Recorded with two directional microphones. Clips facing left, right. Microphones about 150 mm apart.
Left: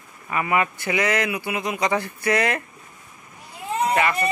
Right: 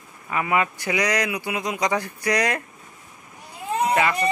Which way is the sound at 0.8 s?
15° right (ahead or behind).